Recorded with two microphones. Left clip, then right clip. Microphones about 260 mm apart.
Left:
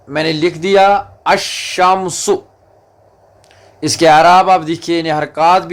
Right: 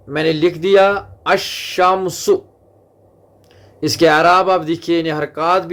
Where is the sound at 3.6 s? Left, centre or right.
Centre.